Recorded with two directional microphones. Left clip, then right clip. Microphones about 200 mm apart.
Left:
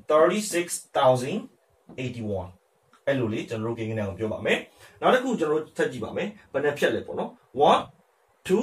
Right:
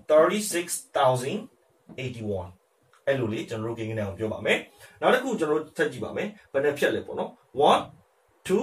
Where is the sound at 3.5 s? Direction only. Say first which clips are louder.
Left 1 dB; 10° left (ahead or behind).